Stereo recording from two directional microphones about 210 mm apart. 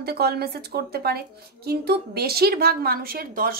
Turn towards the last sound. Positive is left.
turn(degrees=-45)  # may be behind; listen again after turning